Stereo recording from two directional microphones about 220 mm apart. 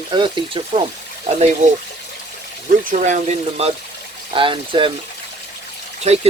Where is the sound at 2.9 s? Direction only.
35° right (ahead or behind).